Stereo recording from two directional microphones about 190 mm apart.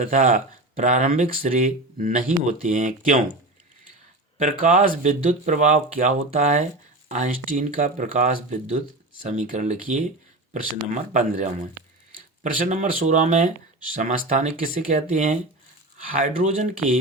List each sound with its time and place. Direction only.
0.0 s speech: 40° right (ahead or behind)
4.4 s speech: 40° right (ahead or behind)